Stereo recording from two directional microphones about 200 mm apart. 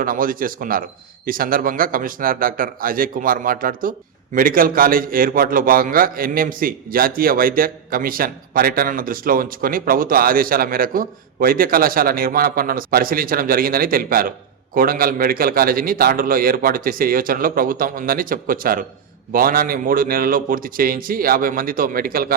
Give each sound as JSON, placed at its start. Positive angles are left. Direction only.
{"t": 0.0, "sound": "a man's voice", "side_deg": -45}